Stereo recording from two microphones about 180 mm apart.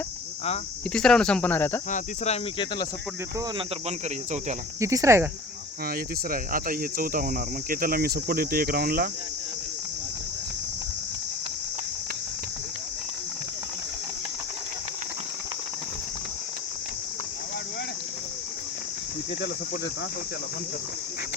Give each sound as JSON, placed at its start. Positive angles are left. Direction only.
{"t": 0.9, "sound": "speech", "side_deg": 5}
{"t": 1.9, "sound": "speech", "side_deg": 35}
{"t": 3.8, "sound": "speech", "side_deg": -40}
{"t": 4.8, "sound": "speech", "side_deg": -15}
{"t": 5.9, "sound": "speech", "side_deg": -50}